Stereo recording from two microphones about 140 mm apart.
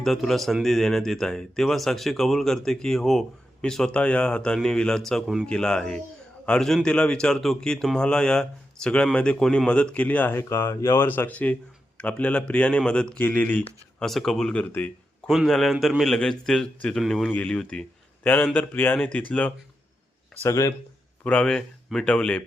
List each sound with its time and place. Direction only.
0.0 s speech: centre (ahead or behind)
20.4 s speech: 20° left (ahead or behind)
21.2 s speech: 5° left (ahead or behind)